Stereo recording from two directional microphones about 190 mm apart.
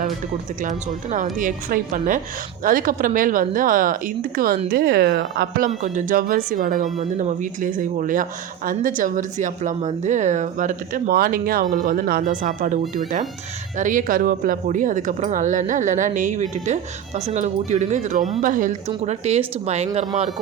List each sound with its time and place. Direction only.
0.6 s speech: 40° right (ahead or behind)